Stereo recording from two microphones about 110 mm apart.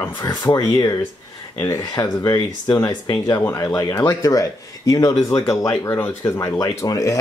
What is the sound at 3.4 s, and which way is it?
Speech, 20° left (ahead or behind).